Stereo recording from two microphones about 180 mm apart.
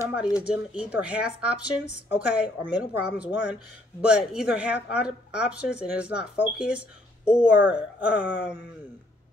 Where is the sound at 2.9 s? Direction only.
65° left (ahead or behind).